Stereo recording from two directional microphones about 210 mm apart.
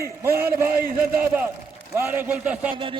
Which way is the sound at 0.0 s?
10° right (ahead or behind).